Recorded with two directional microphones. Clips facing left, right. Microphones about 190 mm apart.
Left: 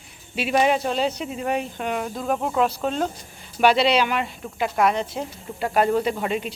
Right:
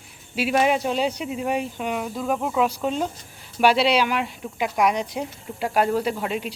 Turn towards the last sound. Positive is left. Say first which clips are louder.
# left 1 dB
turn(degrees=-5)  # may be behind; listen again after turning